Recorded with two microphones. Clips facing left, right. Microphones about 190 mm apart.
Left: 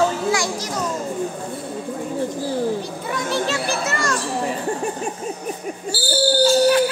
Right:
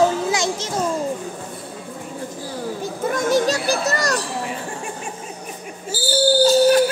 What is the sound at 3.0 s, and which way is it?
Children playing, 45° right (ahead or behind).